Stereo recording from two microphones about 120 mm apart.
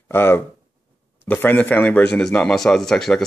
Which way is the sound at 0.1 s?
20° left (ahead or behind).